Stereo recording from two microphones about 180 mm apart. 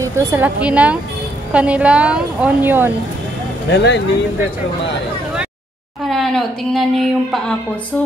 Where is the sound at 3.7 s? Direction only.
80° left.